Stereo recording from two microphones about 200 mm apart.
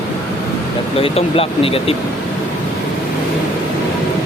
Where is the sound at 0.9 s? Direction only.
30° left (ahead or behind).